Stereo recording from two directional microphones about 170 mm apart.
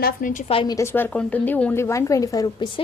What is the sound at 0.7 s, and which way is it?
A woman's voice, 15° left (ahead or behind).